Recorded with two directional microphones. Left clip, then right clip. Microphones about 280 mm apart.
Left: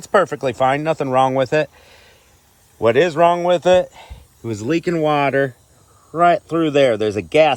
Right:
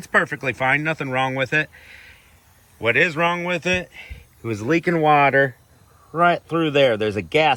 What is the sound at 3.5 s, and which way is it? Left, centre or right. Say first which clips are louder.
Speech: left 9 dB; left.